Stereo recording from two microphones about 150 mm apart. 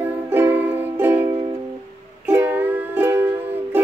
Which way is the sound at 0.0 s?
15° right (ahead or behind).